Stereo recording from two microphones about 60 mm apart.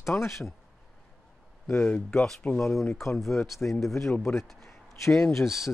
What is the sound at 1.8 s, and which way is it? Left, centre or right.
Speech, left.